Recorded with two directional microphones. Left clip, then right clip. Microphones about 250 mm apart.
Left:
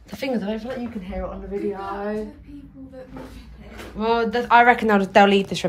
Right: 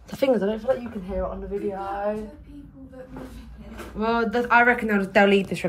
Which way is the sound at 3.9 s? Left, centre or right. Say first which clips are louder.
Left 2 dB; centre.